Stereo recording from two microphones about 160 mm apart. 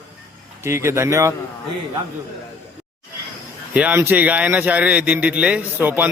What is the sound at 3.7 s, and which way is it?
A man's voice, 10° right (ahead or behind).